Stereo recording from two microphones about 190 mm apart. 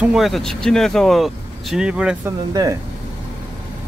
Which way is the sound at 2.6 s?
20° right (ahead or behind).